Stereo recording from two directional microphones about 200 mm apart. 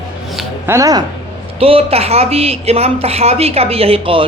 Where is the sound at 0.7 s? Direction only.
15° right (ahead or behind).